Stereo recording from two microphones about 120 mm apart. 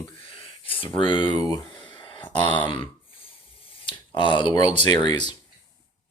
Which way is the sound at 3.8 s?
40° left (ahead or behind).